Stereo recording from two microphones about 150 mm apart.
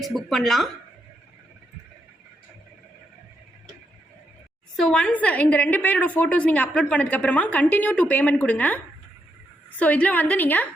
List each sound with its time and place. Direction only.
0.0 s a woman's voice: centre (ahead or behind)
4.8 s a woman's voice: 5° left (ahead or behind)